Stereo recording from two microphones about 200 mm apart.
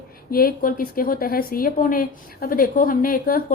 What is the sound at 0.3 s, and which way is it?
A woman's voice, 50° left (ahead or behind).